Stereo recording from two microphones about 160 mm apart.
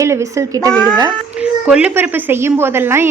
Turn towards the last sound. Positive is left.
turn(degrees=-15)  # may be behind; listen again after turning